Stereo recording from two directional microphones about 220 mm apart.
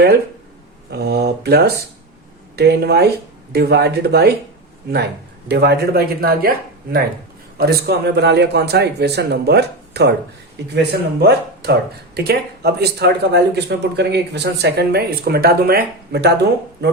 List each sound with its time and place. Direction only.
0.9 s speech: 45° right (ahead or behind)
5.5 s speech: 45° right (ahead or behind)